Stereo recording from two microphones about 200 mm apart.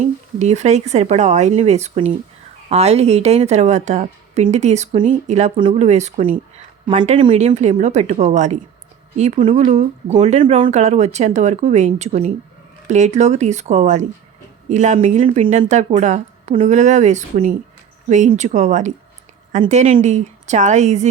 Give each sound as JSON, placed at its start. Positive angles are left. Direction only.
{"t": 0.0, "sound": "a woman's voice", "side_deg": -35}